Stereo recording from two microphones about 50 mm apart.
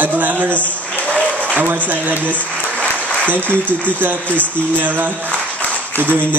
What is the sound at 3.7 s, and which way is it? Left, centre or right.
A man's voice, left.